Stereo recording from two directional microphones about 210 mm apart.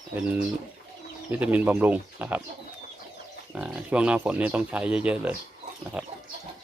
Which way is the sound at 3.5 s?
5° right (ahead or behind).